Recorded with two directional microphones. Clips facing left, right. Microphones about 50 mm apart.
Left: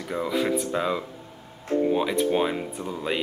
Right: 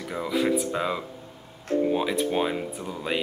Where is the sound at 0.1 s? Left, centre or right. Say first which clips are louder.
Even; centre.